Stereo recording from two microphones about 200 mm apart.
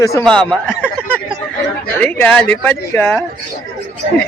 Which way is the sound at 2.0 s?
5° left (ahead or behind).